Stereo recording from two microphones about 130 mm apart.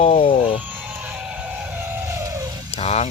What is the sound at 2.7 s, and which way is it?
Speech, 55° left (ahead or behind).